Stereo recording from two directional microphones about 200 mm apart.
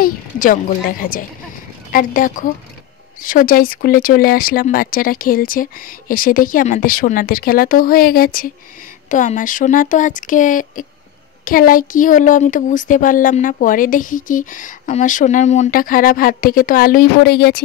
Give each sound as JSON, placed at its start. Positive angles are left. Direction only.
{"t": 0.0, "sound": "speech", "side_deg": 45}